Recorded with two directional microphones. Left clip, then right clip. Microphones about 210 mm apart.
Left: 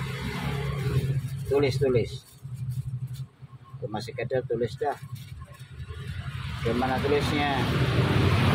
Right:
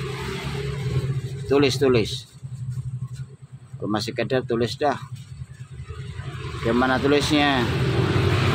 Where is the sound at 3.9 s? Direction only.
40° right (ahead or behind).